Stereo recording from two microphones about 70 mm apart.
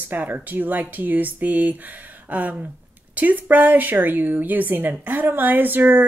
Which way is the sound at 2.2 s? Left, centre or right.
Right.